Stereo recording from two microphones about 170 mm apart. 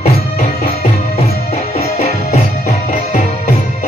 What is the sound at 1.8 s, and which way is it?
Music, 40° left (ahead or behind).